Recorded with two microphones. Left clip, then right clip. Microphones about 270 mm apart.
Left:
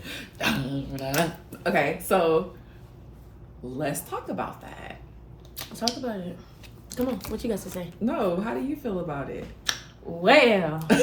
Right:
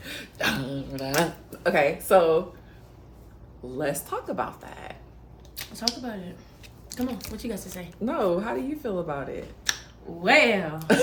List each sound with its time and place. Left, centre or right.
0.0 s speech: centre
3.8 s speech: centre
5.5 s speech: centre
8.0 s speech: centre
9.7 s a sound: centre
10.2 s speech: centre
10.8 s speech: centre